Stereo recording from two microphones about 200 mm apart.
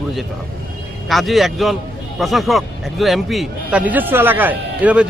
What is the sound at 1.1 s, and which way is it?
Speech, centre (ahead or behind).